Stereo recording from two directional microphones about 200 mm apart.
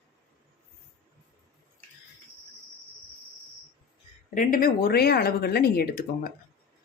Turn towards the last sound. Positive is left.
turn(degrees=50)  # may be behind; listen again after turning